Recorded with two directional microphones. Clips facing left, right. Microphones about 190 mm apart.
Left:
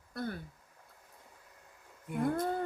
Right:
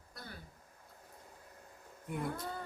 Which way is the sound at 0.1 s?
55° left (ahead or behind).